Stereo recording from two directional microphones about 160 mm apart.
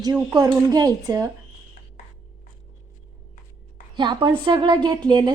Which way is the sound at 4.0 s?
30° right (ahead or behind).